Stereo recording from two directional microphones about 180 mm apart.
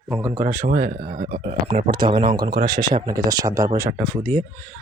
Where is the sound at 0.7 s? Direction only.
55° right (ahead or behind).